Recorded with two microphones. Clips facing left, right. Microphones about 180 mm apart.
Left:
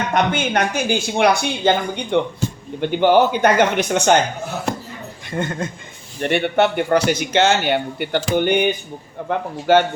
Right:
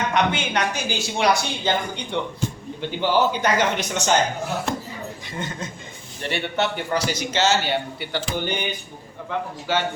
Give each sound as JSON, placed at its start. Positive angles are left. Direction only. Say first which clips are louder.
{"t": 0.1, "sound": "a man's voice", "louder": "left 3 dB", "side_deg": 45}
{"t": 5.3, "sound": "a man's voice", "louder": "left 10 dB", "side_deg": 55}